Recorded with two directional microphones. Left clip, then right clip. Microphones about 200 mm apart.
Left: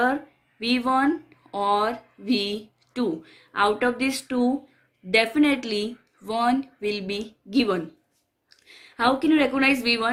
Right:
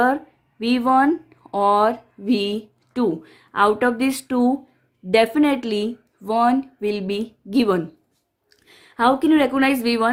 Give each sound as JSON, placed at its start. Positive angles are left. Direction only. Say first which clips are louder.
{"t": 0.6, "sound": "a woman's voice", "louder": "right 5 dB", "side_deg": -45}